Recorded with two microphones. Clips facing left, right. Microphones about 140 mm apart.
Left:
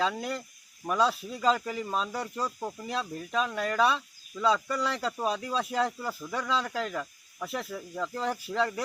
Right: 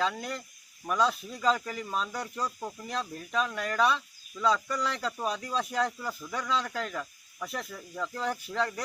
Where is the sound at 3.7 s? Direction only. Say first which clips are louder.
Even; 5° left (ahead or behind).